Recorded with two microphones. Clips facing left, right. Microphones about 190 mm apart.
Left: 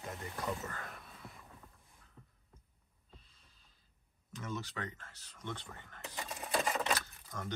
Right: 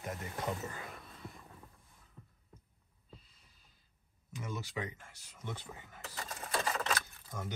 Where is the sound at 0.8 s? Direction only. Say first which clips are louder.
Right 2 dB; centre (ahead or behind).